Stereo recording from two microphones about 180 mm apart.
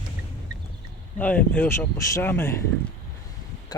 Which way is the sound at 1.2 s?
10° left (ahead or behind).